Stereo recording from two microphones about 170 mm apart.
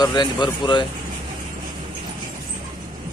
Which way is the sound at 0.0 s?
25° left (ahead or behind).